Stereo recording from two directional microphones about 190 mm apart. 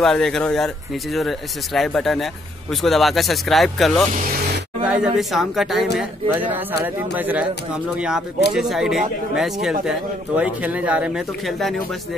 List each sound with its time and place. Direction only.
0.0 s speech: centre (ahead or behind)
8.5 s speech: centre (ahead or behind)